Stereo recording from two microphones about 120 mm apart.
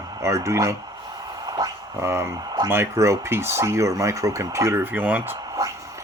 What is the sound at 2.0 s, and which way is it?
Speech, 20° right (ahead or behind).